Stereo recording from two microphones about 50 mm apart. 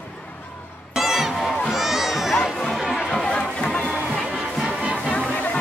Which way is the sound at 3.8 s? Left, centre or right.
Centre.